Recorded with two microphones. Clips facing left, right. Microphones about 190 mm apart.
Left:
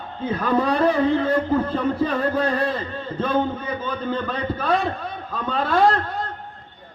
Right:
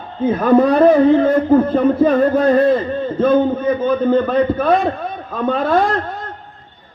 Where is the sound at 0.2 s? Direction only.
50° right (ahead or behind).